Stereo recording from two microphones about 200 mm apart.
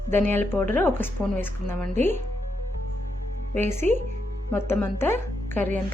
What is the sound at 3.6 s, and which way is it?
Speech, 35° right (ahead or behind).